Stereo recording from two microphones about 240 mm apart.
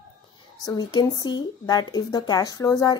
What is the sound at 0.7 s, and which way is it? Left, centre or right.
Speech, centre.